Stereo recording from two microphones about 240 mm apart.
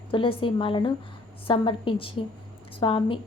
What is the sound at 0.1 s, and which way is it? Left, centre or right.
A woman's voice, left.